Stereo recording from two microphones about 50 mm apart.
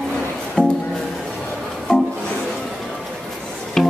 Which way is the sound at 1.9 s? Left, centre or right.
Centre.